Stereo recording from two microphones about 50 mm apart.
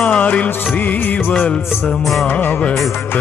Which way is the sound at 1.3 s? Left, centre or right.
Left.